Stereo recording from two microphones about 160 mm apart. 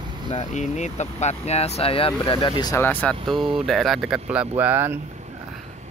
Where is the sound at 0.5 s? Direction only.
45° left (ahead or behind); by 2.8 s 25° left (ahead or behind).